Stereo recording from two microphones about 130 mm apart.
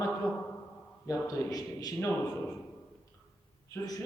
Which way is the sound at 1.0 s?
30° left (ahead or behind).